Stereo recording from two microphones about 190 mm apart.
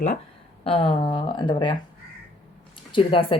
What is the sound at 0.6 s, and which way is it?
Speech, 30° left (ahead or behind).